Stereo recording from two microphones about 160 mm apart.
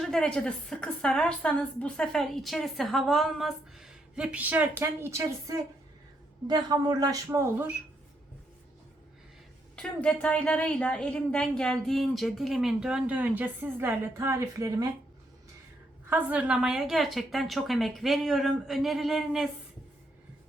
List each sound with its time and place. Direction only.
0.0 s a woman's voice: 5° left (ahead or behind); by 7.8 s 15° right (ahead or behind)
9.7 s a woman's voice: 5° left (ahead or behind); by 14.8 s 20° right (ahead or behind)
16.0 s a woman's voice: 10° right (ahead or behind)